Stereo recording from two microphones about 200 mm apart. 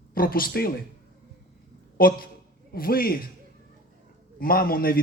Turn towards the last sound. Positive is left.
turn(degrees=45)  # may be behind; listen again after turning